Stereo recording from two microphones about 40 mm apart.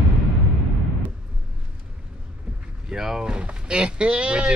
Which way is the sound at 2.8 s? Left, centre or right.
Centre.